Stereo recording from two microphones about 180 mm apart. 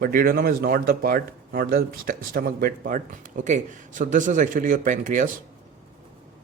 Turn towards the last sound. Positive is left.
turn(degrees=-45)  # may be behind; listen again after turning